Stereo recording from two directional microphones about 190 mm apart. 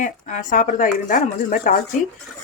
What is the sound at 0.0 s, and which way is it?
Speech, 40° left (ahead or behind).